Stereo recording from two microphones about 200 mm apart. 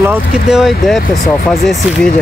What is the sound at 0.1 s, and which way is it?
Speech, centre (ahead or behind).